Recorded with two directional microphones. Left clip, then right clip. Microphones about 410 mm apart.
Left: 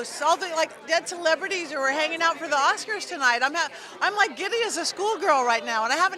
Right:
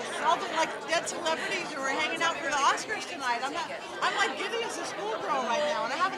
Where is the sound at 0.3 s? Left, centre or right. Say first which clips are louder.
Left 4 dB; left.